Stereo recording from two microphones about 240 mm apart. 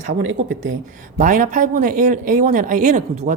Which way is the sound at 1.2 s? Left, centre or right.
Right.